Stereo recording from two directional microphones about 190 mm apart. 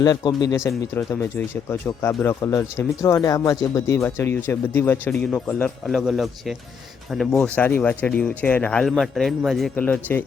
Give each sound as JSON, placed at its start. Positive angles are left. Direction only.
{"t": 0.0, "sound": "speech", "side_deg": 20}